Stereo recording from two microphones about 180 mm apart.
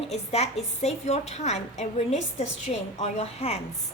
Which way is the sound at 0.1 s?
35° left (ahead or behind).